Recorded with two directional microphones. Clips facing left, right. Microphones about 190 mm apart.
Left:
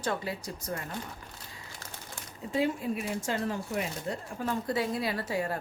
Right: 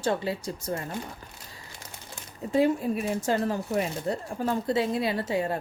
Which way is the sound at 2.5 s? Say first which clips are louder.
Right 6 dB; 40° right (ahead or behind).